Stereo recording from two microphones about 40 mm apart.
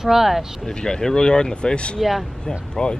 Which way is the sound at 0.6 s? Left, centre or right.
Centre.